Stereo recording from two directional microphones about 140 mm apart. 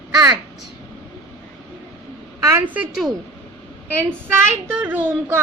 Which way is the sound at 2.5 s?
15° right (ahead or behind).